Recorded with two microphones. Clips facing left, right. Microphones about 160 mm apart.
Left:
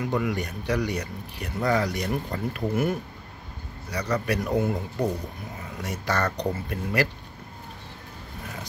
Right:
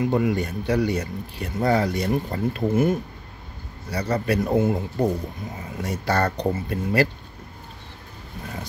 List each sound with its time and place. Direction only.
0.0 s speech: 25° right (ahead or behind)